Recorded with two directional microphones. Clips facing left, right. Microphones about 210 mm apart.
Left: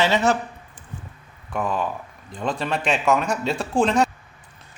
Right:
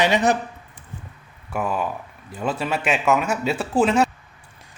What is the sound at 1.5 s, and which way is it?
A man's voice, 5° right (ahead or behind).